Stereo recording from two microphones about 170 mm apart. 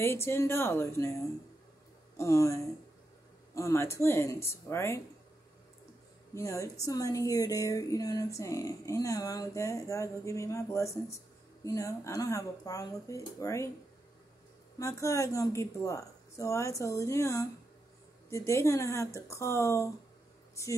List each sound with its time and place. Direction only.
0.0 s speech: 15° left (ahead or behind)
2.1 s speech: 20° left (ahead or behind)
6.3 s speech: 20° left (ahead or behind)
14.8 s speech: 20° left (ahead or behind)